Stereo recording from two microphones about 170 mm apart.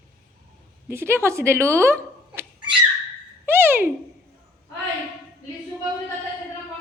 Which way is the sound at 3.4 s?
10° right (ahead or behind).